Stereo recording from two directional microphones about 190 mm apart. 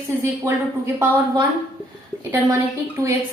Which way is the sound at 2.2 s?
15° right (ahead or behind).